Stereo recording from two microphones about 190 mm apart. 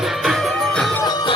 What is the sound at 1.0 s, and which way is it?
Music, 20° left (ahead or behind).